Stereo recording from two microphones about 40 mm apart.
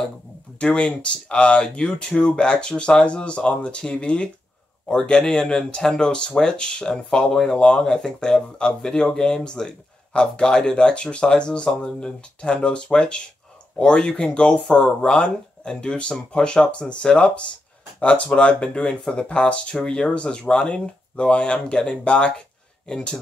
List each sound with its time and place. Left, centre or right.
0.6 s speech: left